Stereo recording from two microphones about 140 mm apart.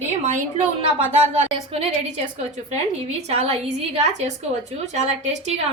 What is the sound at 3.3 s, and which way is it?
A woman's voice, 45° right (ahead or behind).